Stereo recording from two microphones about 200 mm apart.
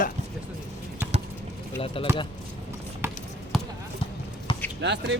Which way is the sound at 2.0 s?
25° left (ahead or behind).